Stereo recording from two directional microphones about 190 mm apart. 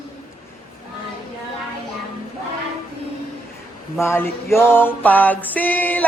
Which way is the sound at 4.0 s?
15° left (ahead or behind).